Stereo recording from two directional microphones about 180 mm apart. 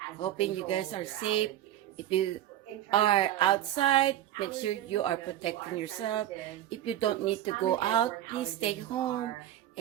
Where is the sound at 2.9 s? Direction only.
30° left (ahead or behind).